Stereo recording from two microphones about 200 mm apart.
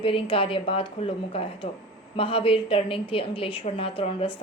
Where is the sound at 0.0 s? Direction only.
25° left (ahead or behind).